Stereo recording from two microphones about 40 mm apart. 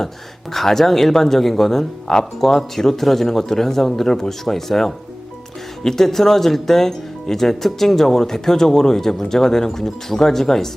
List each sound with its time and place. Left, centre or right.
0.5 s speech: centre